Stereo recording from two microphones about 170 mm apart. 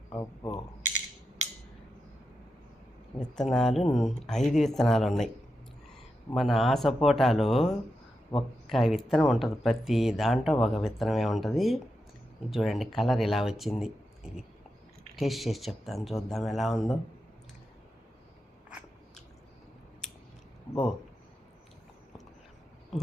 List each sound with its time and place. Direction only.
0.1 s camera: 20° left (ahead or behind)
3.2 s speech: 5° left (ahead or behind)
6.3 s speech: centre (ahead or behind)
8.7 s speech: centre (ahead or behind)